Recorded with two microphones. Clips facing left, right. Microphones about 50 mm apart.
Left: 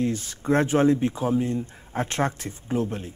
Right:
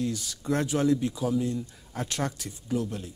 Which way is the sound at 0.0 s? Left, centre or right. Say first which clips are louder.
Left 5 dB; left.